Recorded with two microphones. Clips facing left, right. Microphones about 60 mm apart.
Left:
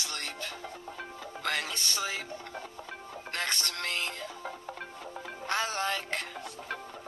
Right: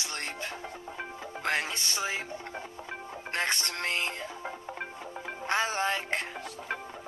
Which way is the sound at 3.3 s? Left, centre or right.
Right.